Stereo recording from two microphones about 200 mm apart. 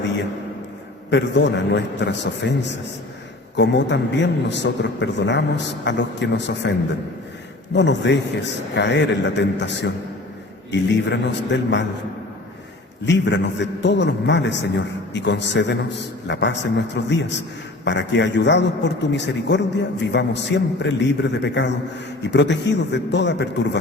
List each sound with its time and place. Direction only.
1.1 s a man's voice: 60° left (ahead or behind)
13.1 s a man's voice: 60° left (ahead or behind)